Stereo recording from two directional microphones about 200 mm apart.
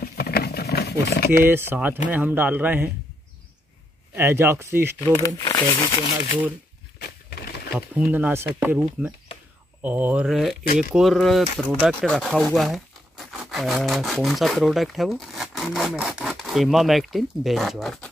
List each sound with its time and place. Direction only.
0.0 s a sound: 50° left (ahead or behind)
1.3 s speech: 10° right (ahead or behind)
4.1 s speech: 10° right (ahead or behind)
5.1 s speech: 20° left (ahead or behind)
7.0 s a sound: 50° left (ahead or behind)
7.7 s speech: 10° right (ahead or behind)